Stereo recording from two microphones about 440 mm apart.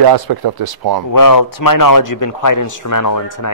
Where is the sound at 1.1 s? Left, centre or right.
Left.